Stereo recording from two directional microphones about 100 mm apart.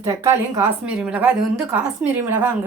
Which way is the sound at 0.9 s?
10° right (ahead or behind).